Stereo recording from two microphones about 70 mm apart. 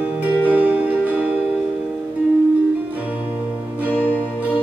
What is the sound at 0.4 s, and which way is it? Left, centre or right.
Music, right.